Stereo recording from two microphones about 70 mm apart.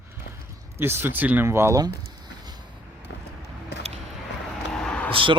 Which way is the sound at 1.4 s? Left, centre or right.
Right.